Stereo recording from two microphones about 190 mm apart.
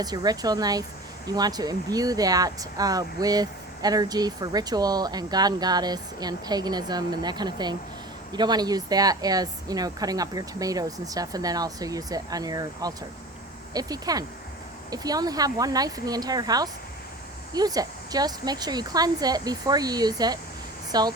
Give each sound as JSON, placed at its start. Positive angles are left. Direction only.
{"t": 0.0, "sound": "speech", "side_deg": -20}